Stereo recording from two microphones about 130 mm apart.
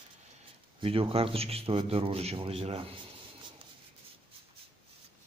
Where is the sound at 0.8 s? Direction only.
45° right (ahead or behind).